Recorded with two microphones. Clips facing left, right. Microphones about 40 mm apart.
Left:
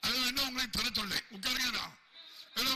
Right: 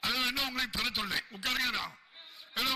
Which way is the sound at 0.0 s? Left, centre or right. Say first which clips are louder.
Right 2 dB; centre.